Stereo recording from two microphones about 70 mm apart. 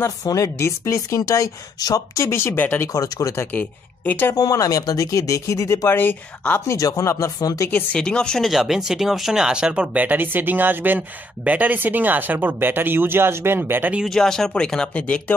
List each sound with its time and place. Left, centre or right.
0.0 s speech: left
1.8 s speech: left
2.1 s speech: left
2.9 s speech: left
3.5 s speech: left
4.4 s speech: left
5.9 s speech: left
6.7 s speech: left
7.3 s speech: left
7.9 s speech: centre
8.5 s speech: centre; by 13.9 s right
14.0 s speech: centre